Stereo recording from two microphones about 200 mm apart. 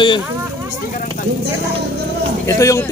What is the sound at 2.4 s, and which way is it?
Speech, 15° left (ahead or behind).